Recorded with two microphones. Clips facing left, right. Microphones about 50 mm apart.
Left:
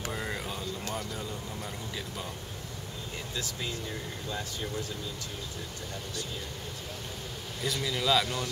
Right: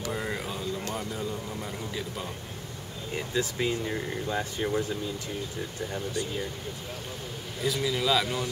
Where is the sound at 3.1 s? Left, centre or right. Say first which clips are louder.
Right 9 dB; right.